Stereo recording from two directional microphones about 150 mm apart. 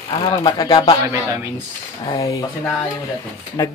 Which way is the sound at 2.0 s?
20° left (ahead or behind).